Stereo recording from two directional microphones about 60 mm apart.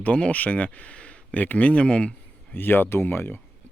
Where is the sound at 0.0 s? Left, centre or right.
Left.